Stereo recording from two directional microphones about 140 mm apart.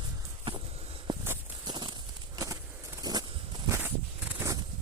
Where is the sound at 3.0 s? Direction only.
30° right (ahead or behind).